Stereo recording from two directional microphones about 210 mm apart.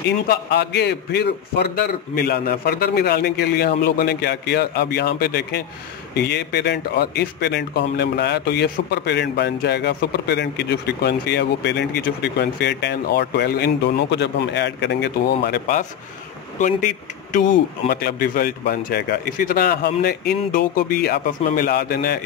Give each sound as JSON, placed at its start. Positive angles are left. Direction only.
{"t": 0.3, "sound": "speech", "side_deg": 55}
{"t": 16.5, "sound": "speech", "side_deg": 40}